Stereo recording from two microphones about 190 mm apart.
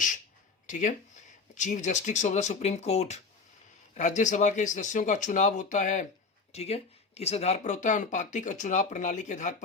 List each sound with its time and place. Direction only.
0.7 s speech: 40° left (ahead or behind)